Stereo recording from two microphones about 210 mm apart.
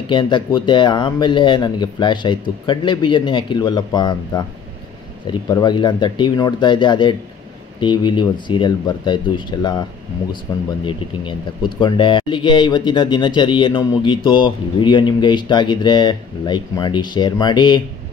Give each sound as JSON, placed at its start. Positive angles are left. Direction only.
{"t": 0.1, "sound": "speech", "side_deg": 20}
{"t": 11.8, "sound": "speech", "side_deg": 20}